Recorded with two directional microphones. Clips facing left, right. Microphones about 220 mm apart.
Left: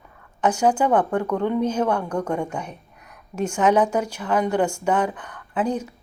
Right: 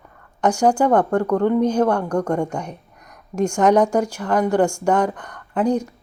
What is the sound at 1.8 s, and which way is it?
Speech, 10° left (ahead or behind).